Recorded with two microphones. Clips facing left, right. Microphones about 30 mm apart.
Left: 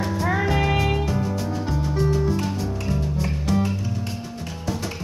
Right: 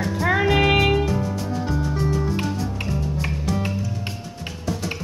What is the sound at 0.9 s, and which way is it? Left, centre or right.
Music, centre.